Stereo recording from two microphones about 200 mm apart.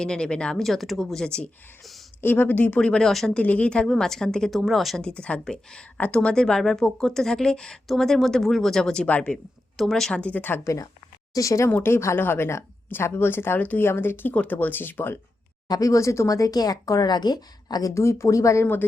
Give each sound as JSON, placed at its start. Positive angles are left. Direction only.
{"t": 0.0, "sound": "speech", "side_deg": 5}